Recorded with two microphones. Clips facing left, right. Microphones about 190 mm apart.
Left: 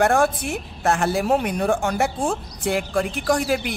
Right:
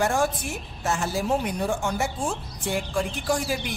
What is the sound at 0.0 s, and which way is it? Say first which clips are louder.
A woman's voice: left 5 dB; 60° left (ahead or behind).